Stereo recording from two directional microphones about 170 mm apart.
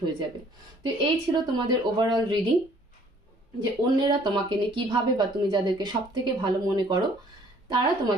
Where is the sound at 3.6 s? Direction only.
25° right (ahead or behind).